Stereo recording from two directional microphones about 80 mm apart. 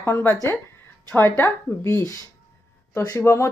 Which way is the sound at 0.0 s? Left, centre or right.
Left.